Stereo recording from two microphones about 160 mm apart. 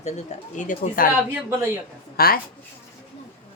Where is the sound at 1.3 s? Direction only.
15° right (ahead or behind).